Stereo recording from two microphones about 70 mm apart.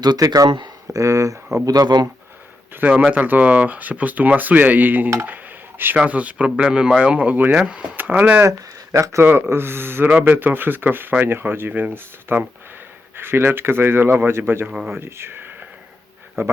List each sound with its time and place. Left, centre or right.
0.0 s speech: right
1.0 s speech: right
1.6 s speech: right
3.1 s speech: right
8.4 s speech: right
9.2 s speech: right
14.7 s speech: centre
14.9 s speech: right